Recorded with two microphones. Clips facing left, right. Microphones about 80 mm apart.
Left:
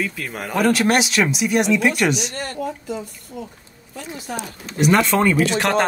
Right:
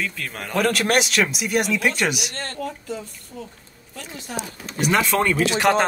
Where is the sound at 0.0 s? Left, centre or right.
Centre.